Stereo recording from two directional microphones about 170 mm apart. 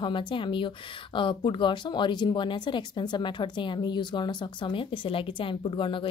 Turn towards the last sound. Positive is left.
turn(degrees=30)  # may be behind; listen again after turning